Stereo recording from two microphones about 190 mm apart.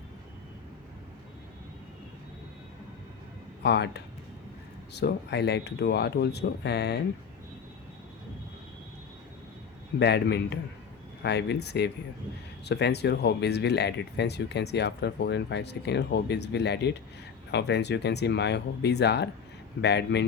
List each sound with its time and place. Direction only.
3.6 s speech: 60° left (ahead or behind)
10.0 s speech: 60° left (ahead or behind)